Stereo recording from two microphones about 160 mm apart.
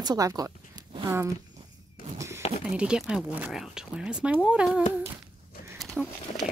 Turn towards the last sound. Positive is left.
turn(degrees=0)  # may be behind; listen again after turning